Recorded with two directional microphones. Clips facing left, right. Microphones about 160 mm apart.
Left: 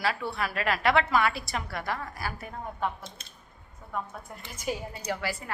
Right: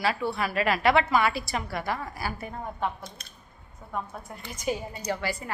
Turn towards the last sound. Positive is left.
turn(degrees=0)  # may be behind; listen again after turning